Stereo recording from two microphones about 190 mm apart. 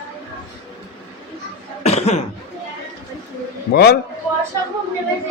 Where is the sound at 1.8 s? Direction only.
35° left (ahead or behind).